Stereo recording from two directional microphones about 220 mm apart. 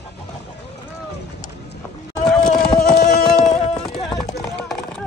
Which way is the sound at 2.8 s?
45° left (ahead or behind).